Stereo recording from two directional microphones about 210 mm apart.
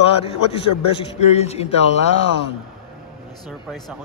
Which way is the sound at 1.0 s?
30° left (ahead or behind).